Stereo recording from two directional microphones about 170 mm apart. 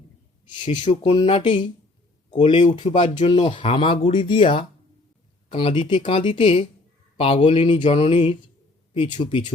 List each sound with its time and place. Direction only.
0.4 s speech: 25° left (ahead or behind)
0.7 s speech: 45° left (ahead or behind)
1.0 s speech: 35° left (ahead or behind)
2.8 s speech: 40° left (ahead or behind)
3.2 s speech: 30° left (ahead or behind)